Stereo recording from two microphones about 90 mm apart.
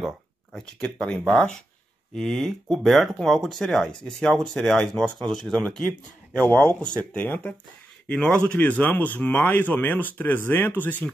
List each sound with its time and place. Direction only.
0.6 s speech: 5° left (ahead or behind)